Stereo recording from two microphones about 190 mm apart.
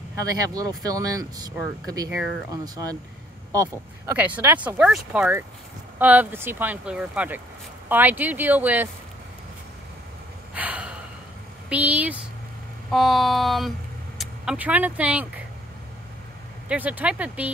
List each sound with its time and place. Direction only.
0.6 s speech: 20° right (ahead or behind)
2.0 s speech: centre (ahead or behind)
2.5 s speech: 20° right (ahead or behind)
10.5 s gasp: 5° right (ahead or behind)
11.7 s speech: 10° right (ahead or behind)
16.6 s speech: 10° right (ahead or behind)